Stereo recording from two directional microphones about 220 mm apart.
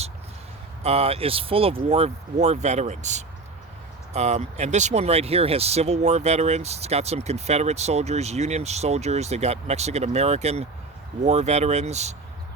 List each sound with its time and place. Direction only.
0.8 s speech: 30° right (ahead or behind)